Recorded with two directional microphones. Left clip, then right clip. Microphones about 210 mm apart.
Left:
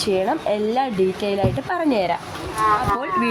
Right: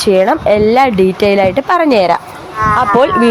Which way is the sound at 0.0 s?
25° right (ahead or behind).